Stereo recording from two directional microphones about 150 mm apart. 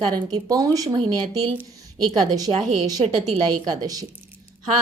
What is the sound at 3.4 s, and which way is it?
Speech, 25° right (ahead or behind).